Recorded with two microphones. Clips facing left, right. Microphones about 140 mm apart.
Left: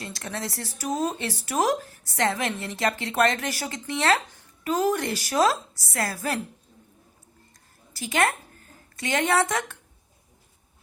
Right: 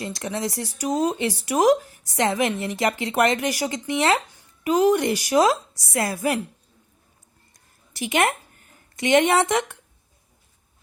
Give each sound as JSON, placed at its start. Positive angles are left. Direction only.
{"t": 0.0, "sound": "speech", "side_deg": -15}
{"t": 7.9, "sound": "speech", "side_deg": -20}